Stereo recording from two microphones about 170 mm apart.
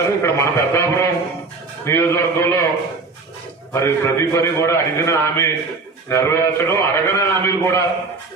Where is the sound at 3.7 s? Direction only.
15° left (ahead or behind).